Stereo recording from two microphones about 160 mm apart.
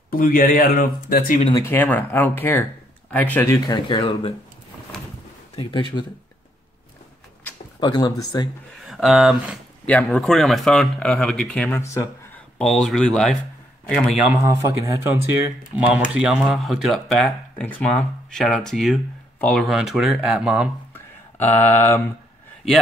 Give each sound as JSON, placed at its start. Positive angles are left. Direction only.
{"t": 0.1, "sound": "speech", "side_deg": 65}
{"t": 1.5, "sound": "speech", "side_deg": 15}
{"t": 5.6, "sound": "speech", "side_deg": 30}
{"t": 7.8, "sound": "speech", "side_deg": 25}
{"t": 8.8, "sound": "speech", "side_deg": 0}
{"t": 11.7, "sound": "speech", "side_deg": 20}
{"t": 12.5, "sound": "speech", "side_deg": 0}
{"t": 14.3, "sound": "speech", "side_deg": -20}
{"t": 20.9, "sound": "a sound", "side_deg": 15}